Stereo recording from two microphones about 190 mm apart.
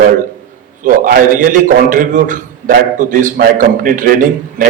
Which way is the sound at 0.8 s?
45° right (ahead or behind).